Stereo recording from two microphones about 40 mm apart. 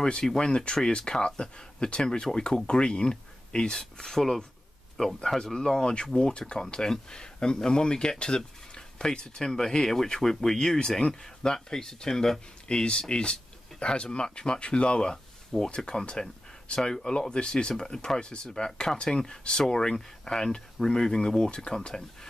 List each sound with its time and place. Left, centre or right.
0.0 s speech: centre
13.1 s a sound: left
14.0 s speech: left